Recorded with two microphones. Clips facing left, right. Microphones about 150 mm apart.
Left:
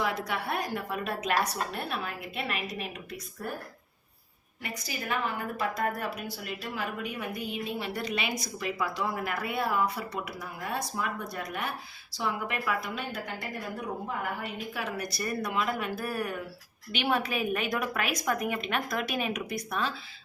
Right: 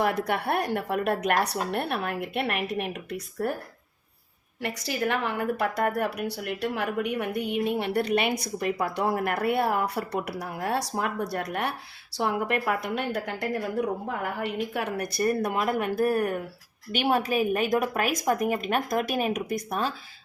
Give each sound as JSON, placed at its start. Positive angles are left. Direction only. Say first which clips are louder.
{"t": 0.0, "sound": "a woman's voice", "louder": "right 5 dB", "side_deg": -60}
{"t": 4.6, "sound": "a woman's voice", "louder": "right 9 dB", "side_deg": -75}
{"t": 12.1, "sound": "a woman's voice", "louder": "right 6 dB", "side_deg": -60}
{"t": 14.4, "sound": "a woman's voice", "louder": "right 6 dB", "side_deg": -60}